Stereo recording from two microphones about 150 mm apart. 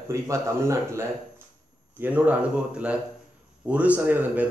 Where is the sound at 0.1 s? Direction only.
20° right (ahead or behind).